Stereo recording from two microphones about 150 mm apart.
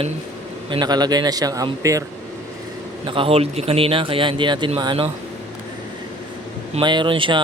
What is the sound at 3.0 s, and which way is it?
A man's voice, 35° right (ahead or behind).